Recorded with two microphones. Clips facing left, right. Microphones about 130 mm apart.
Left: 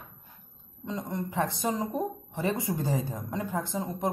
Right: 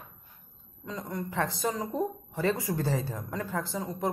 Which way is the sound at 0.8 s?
25° left (ahead or behind).